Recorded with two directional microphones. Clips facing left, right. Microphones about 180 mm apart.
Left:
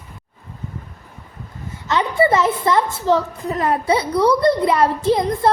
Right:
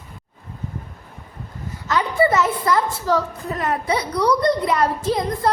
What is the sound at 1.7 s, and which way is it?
A woman's voice, 25° left (ahead or behind).